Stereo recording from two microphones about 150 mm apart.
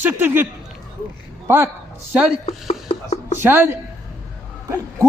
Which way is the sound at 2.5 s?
45° left (ahead or behind).